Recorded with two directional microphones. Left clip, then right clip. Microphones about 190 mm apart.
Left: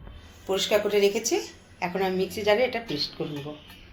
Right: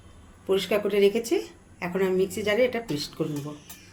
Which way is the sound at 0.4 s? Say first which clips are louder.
Left 1 dB; 55° right (ahead or behind).